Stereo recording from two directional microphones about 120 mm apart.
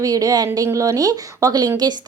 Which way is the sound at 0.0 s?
30° right (ahead or behind).